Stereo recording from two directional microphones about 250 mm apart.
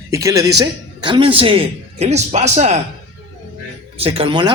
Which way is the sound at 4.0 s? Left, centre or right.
Right.